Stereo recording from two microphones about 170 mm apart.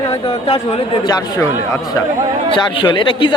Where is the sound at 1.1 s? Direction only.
20° left (ahead or behind).